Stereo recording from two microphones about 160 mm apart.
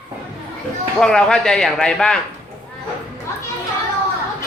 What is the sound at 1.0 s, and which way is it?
A man's voice, 5° left (ahead or behind).